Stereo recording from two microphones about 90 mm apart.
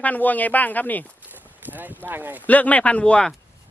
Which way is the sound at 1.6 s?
20° right (ahead or behind).